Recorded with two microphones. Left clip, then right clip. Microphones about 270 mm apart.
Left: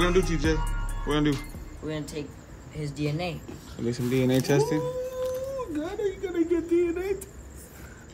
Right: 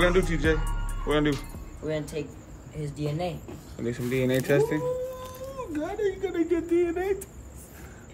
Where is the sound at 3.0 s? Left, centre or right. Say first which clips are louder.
Even; left.